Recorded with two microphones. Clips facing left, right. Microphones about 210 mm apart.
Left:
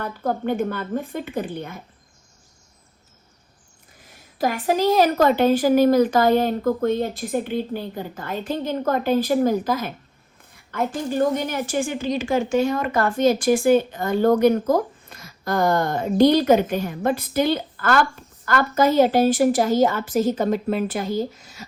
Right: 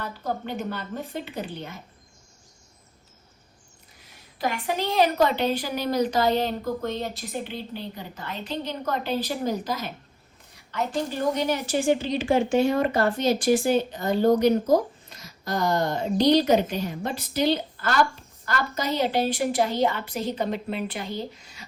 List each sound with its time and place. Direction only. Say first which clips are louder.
0.0 s a woman's voice: left 6 dB; 50° left (ahead or behind)
4.0 s a woman's voice: left 5 dB; 45° left (ahead or behind)